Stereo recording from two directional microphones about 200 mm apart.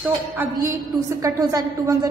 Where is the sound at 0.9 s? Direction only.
20° right (ahead or behind).